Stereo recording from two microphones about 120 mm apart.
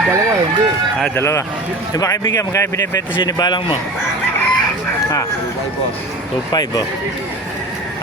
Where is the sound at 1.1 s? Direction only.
25° left (ahead or behind); by 3.8 s 40° left (ahead or behind).